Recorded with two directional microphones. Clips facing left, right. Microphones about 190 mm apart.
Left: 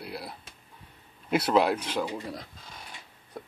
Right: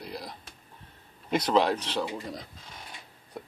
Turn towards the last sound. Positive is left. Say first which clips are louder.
# even
turn(degrees=0)  # may be behind; listen again after turning